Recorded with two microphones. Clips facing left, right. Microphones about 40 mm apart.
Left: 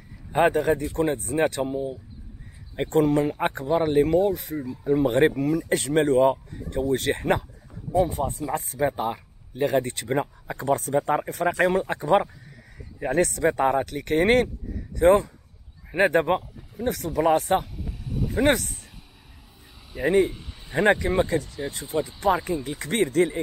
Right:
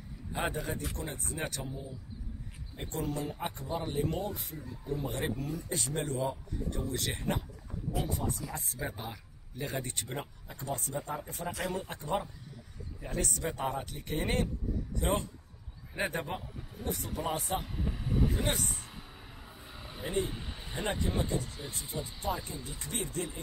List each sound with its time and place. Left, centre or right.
0.3 s speech: left
0.9 s speech: left
1.7 s speech: left
6.0 s speech: left
6.7 s speech: left
10.1 s speech: left
15.0 s speech: left
15.9 s speech: left
17.7 s vehicle: right
19.7 s a sound: centre
20.0 s speech: left
20.2 s a sound: centre
20.7 s speech: left